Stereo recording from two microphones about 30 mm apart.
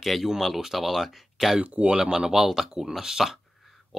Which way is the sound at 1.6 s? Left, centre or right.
Right.